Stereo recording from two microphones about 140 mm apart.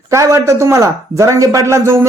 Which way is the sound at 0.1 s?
20° right (ahead or behind).